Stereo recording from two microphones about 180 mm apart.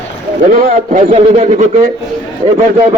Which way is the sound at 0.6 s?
45° right (ahead or behind).